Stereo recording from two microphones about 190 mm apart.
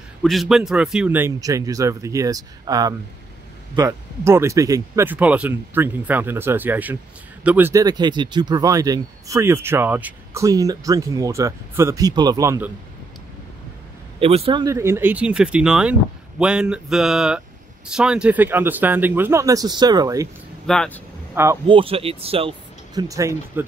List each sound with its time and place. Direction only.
0.2 s speech: centre (ahead or behind)
14.2 s speech: 30° right (ahead or behind)
20.6 s speech: 5° left (ahead or behind)
21.6 s speech: 30° right (ahead or behind)